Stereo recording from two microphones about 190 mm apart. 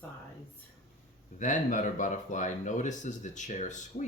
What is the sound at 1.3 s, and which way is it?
Speech, 40° left (ahead or behind).